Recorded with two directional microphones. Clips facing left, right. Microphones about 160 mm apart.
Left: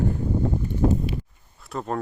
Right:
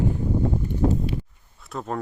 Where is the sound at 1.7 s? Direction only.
Centre (ahead or behind).